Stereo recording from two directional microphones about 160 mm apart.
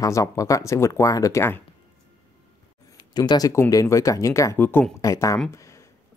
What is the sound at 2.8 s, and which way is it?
Speech, 25° left (ahead or behind).